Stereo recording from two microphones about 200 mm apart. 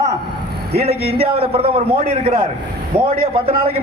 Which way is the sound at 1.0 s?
30° right (ahead or behind).